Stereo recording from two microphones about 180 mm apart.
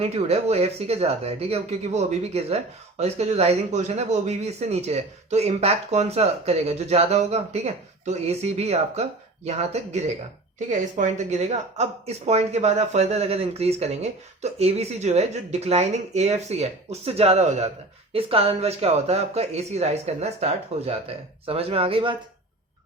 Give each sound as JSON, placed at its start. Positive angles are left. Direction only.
{"t": 0.0, "sound": "a man's voice", "side_deg": -35}